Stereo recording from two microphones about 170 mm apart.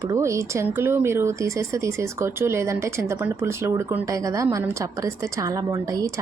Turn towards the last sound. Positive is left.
turn(degrees=-20)  # may be behind; listen again after turning